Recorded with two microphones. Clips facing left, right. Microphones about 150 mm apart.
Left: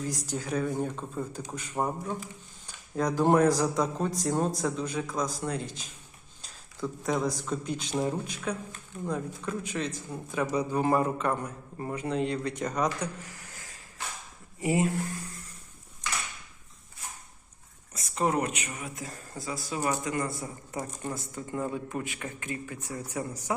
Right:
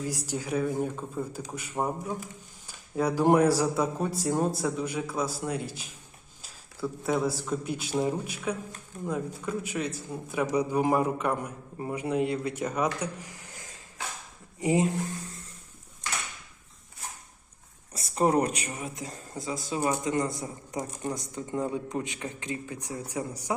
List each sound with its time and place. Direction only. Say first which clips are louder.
0.0 s speech: right 1 dB; 10° right (ahead or behind)
6.4 s a sound: right 1 dB; 5° right (ahead or behind)
7.4 s speech: right 1 dB; 10° right (ahead or behind)
17.9 s speech: right 4 dB; 35° right (ahead or behind); by 23.6 s 15° right (ahead or behind)